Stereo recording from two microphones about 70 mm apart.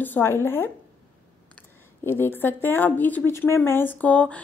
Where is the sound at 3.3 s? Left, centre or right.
Left.